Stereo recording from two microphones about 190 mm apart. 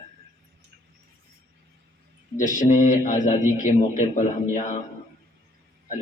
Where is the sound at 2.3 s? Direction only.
40° left (ahead or behind).